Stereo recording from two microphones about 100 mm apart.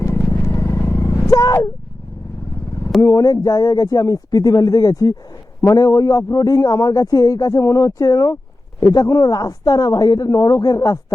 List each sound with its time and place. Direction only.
0.2 s vehicle: 25° left (ahead or behind)
3.0 s a man's voice: 35° left (ahead or behind)